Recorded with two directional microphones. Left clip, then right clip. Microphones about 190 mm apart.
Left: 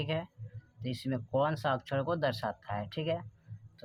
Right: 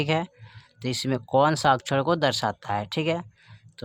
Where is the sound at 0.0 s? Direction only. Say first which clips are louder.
Right 10 dB; 50° right (ahead or behind).